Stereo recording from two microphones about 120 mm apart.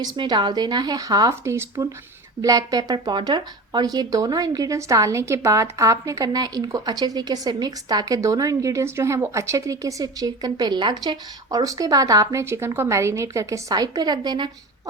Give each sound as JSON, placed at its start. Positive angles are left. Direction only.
{"t": 0.0, "sound": "speech", "side_deg": -35}